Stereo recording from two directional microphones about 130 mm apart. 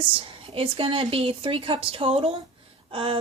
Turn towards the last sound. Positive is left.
turn(degrees=-40)  # may be behind; listen again after turning